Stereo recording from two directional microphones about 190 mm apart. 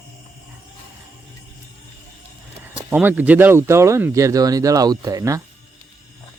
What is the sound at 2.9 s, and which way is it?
Speech, 10° right (ahead or behind).